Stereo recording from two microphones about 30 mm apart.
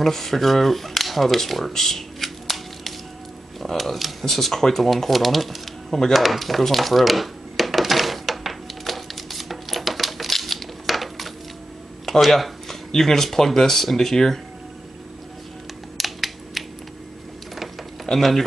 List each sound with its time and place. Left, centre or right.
0.0 s speech: centre
2.2 s scissors: centre
3.5 s speech: centre
4.8 s speech: centre
5.9 s speech: centre
6.1 s speech: centre
6.6 s typewriter: centre
12.3 s speech: centre
16.0 s computer keyboard: centre
18.1 s speech: left